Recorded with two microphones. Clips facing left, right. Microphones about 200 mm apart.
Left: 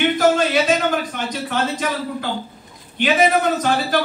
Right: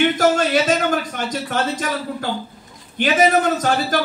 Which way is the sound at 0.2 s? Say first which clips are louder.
Even; 45° right (ahead or behind).